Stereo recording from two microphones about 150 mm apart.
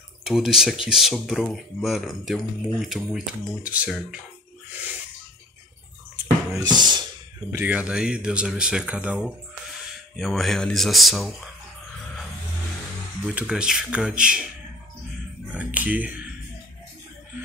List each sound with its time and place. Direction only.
0.2 s speech: 5° right (ahead or behind)
6.6 s speech: 30° right (ahead or behind)
7.5 s speech: 10° right (ahead or behind)
13.2 s speech: 5° right (ahead or behind)
15.5 s speech: 10° right (ahead or behind)